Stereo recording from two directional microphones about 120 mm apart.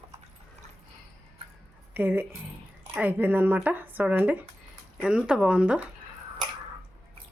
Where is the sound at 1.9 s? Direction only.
15° right (ahead or behind).